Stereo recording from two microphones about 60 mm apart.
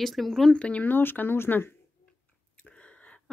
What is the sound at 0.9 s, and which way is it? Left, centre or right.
Speech, left.